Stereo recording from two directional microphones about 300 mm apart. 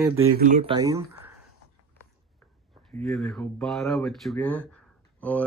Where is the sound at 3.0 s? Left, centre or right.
Centre.